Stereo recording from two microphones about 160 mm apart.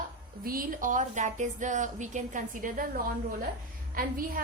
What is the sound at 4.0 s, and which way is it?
Speech, 65° right (ahead or behind).